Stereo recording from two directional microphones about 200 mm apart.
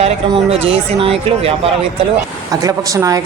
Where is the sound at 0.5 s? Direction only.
30° right (ahead or behind).